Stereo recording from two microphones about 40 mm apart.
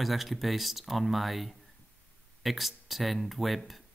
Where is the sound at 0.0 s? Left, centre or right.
Centre.